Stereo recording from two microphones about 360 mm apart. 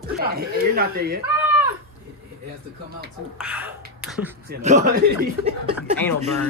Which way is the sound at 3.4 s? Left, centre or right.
Centre.